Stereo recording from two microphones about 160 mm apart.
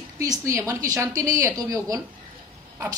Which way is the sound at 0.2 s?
20° right (ahead or behind).